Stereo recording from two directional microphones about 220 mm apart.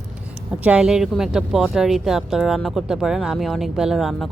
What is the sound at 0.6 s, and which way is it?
Speech, 5° right (ahead or behind).